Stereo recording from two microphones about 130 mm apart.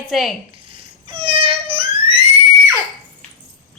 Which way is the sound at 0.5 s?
40° right (ahead or behind).